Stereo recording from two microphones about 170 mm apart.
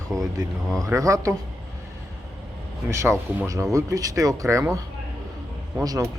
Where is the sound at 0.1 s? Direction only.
Centre (ahead or behind).